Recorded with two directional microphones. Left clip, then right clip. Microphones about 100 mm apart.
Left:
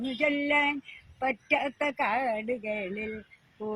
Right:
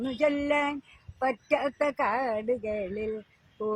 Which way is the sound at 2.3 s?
20° right (ahead or behind).